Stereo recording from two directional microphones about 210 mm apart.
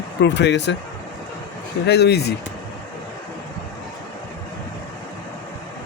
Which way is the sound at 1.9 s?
50° left (ahead or behind).